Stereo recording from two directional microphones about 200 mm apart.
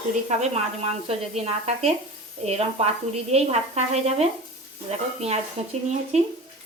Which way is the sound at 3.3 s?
30° right (ahead or behind).